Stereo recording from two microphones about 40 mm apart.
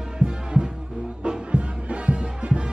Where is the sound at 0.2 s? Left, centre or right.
Right.